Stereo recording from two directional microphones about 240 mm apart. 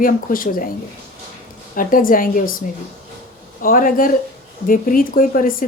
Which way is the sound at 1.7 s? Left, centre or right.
Left.